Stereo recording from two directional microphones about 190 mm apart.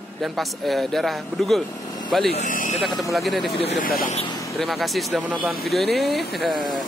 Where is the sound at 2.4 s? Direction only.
40° left (ahead or behind).